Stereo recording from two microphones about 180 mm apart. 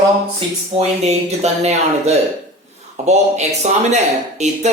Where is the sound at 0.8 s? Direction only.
35° right (ahead or behind).